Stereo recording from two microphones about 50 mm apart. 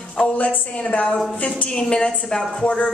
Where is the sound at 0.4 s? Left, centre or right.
Left.